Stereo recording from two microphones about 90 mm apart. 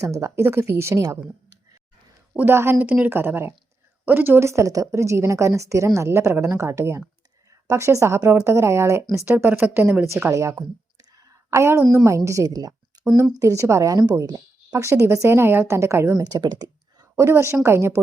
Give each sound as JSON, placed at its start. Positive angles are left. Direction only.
{"t": 0.0, "sound": "a woman's voice", "side_deg": -35}
{"t": 2.3, "sound": "a woman's voice", "side_deg": -25}
{"t": 9.2, "sound": "speech", "side_deg": -20}
{"t": 10.3, "sound": "a woman's voice", "side_deg": -35}
{"t": 11.2, "sound": "a sound", "side_deg": -30}
{"t": 12.0, "sound": "a woman's voice", "side_deg": -35}
{"t": 14.8, "sound": "a woman's voice", "side_deg": -30}
{"t": 16.1, "sound": "speech", "side_deg": -40}
{"t": 17.2, "sound": "a woman's voice", "side_deg": -30}